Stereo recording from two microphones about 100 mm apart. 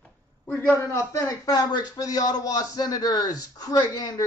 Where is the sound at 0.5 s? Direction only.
25° left (ahead or behind).